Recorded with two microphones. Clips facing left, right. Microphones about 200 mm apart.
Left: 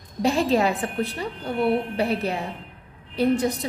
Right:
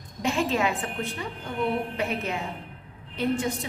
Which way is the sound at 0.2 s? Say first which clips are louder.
Left 5 dB; 35° left (ahead or behind).